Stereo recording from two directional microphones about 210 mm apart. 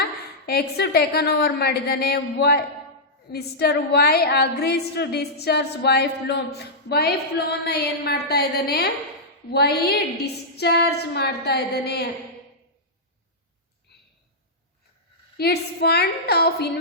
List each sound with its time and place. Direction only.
0.0 s a woman's voice: 50° left (ahead or behind)
15.4 s a woman's voice: 50° left (ahead or behind)